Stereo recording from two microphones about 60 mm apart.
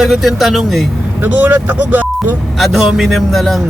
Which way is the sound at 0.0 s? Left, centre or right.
Centre.